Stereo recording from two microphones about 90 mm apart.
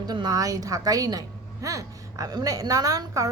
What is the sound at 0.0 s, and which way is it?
A woman's voice, 50° right (ahead or behind).